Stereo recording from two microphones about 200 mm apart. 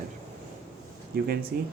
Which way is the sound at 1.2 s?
50° right (ahead or behind).